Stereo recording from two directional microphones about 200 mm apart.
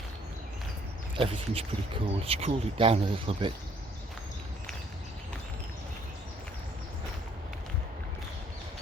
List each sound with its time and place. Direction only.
1.1 s speech: 25° right (ahead or behind)